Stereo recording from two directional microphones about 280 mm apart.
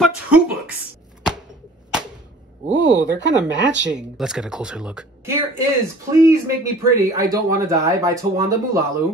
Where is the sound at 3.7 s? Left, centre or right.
Right.